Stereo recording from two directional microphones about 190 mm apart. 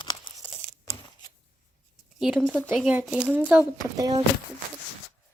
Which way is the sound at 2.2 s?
Centre (ahead or behind).